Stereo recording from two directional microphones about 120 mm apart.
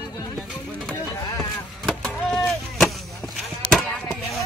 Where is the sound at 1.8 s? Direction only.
5° left (ahead or behind).